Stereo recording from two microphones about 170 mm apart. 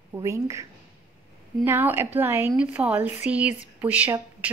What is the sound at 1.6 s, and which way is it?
A woman's voice, 10° right (ahead or behind).